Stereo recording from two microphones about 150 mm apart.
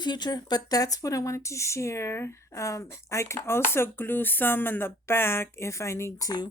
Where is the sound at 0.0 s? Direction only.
30° left (ahead or behind).